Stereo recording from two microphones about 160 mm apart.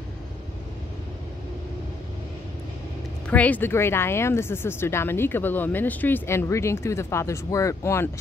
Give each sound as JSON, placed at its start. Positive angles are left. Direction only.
{"t": 3.3, "sound": "a woman's voice", "side_deg": 10}